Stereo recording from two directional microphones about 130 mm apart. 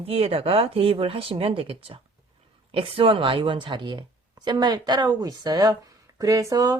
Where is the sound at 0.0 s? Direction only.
50° right (ahead or behind).